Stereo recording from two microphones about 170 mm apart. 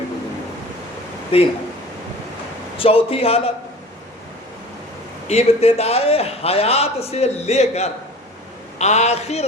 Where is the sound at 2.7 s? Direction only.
35° left (ahead or behind).